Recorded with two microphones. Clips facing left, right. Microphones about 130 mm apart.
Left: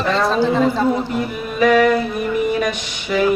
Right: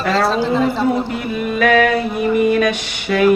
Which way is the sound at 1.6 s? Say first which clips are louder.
Left 1 dB; 70° right (ahead or behind).